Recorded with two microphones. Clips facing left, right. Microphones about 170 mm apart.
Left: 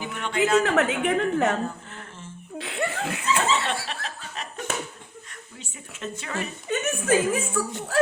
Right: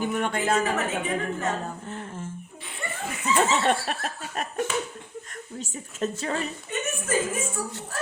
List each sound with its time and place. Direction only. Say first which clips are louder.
0.0 s a woman's voice: even; 50° right (ahead or behind)
0.6 s a woman's voice: left 4 dB; 75° left (ahead or behind)
2.6 s chuckle: left 8 dB; 85° left
3.5 s snicker: right 3 dB; 50° right (ahead or behind)
5.5 s a woman's voice: right 10 dB; 40° right (ahead or behind)
6.7 s a woman's voice: left 9 dB; 80° left